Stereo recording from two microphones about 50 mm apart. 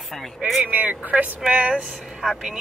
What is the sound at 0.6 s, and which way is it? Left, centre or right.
Speech, right.